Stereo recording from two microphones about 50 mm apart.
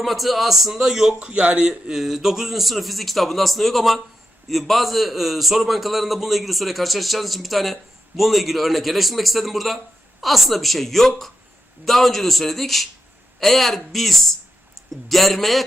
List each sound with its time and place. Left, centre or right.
0.0 s a man's voice: centre
1.2 s speech: right
1.9 s a man's voice: centre